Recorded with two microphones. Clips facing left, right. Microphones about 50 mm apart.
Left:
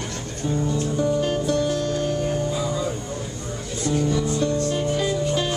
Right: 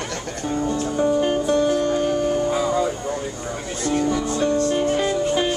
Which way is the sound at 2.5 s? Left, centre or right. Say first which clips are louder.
Right 5 dB; right.